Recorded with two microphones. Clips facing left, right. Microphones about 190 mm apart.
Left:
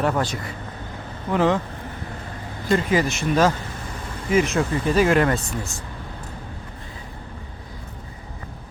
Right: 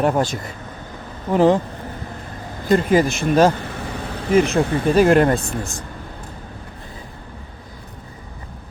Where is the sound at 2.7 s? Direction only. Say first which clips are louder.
Right 4 dB; 50° right (ahead or behind).